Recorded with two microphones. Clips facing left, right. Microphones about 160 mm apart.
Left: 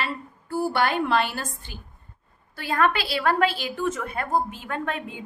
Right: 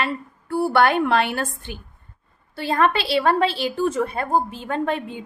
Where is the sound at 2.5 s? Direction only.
30° right (ahead or behind).